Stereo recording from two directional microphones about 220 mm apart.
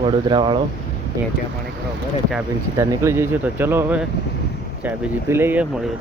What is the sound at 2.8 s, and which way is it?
Speech, 15° right (ahead or behind).